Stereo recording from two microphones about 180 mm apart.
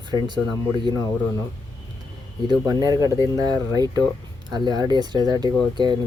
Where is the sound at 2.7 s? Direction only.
20° right (ahead or behind).